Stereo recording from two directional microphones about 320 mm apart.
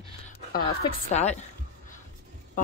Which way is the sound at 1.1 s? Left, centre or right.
Left.